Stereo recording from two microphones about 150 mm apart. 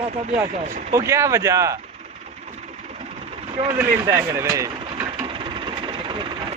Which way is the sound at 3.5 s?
40° right (ahead or behind).